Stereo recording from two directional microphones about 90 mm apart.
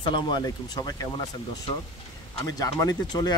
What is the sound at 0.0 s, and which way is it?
Speech, 60° left (ahead or behind).